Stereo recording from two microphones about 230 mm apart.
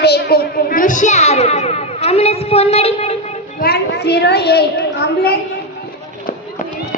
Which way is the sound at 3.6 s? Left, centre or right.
Left.